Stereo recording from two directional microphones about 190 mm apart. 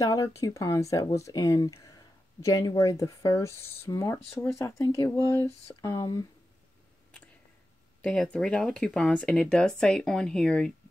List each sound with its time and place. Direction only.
0.0 s speech: 15° left (ahead or behind)
8.0 s speech: 5° left (ahead or behind)